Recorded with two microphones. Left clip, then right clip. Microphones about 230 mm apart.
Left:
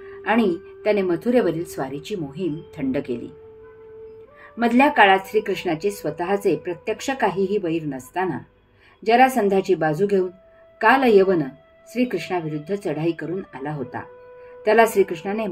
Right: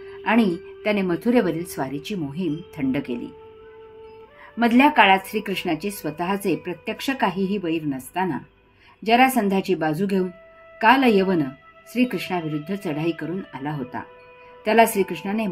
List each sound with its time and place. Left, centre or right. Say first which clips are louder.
0.0 s speech: left 1 dB; right
4.6 s speech: even; right